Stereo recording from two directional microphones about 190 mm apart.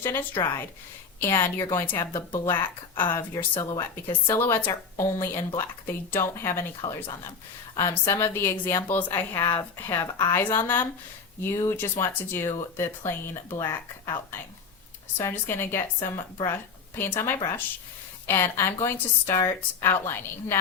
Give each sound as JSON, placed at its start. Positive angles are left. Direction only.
{"t": 0.0, "sound": "speech", "side_deg": 10}
{"t": 2.6, "sound": "speech", "side_deg": 25}
{"t": 7.8, "sound": "speech", "side_deg": 15}